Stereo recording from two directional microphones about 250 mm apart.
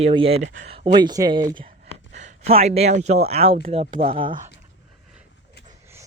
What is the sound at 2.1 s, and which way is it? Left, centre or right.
Speech, right.